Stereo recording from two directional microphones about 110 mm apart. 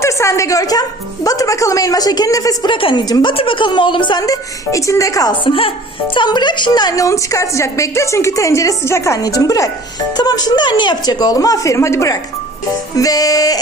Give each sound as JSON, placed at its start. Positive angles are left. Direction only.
{"t": 0.0, "sound": "speech", "side_deg": 25}
{"t": 2.6, "sound": "a woman's voice", "side_deg": 50}
{"t": 3.3, "sound": "a woman's voice", "side_deg": 50}
{"t": 4.2, "sound": "a woman's voice", "side_deg": 30}
{"t": 5.4, "sound": "a woman's voice", "side_deg": 55}
{"t": 6.1, "sound": "a woman's voice", "side_deg": 40}